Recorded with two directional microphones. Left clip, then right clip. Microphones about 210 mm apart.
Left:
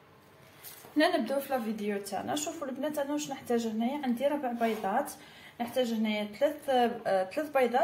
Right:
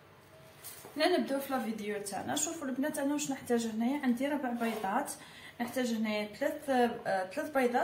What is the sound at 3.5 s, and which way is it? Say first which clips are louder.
Speech: left 2 dB; 20° left (ahead or behind).